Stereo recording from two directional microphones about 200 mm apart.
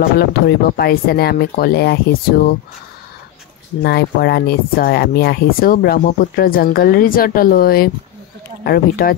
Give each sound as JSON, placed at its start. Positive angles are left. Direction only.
{"t": 0.2, "sound": "speech", "side_deg": 55}
{"t": 3.8, "sound": "speech", "side_deg": 55}